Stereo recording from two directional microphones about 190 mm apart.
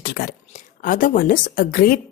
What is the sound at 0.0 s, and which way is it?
A woman's voice, 50° left (ahead or behind).